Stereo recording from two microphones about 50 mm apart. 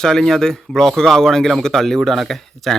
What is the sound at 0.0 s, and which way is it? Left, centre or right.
A man's voice, centre.